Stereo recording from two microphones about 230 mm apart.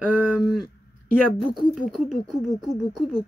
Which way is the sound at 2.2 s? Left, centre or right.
Centre.